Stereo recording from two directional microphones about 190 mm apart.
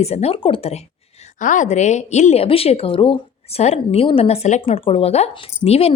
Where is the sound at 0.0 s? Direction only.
35° left (ahead or behind).